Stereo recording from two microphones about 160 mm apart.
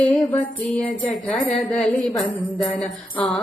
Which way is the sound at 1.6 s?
5° left (ahead or behind).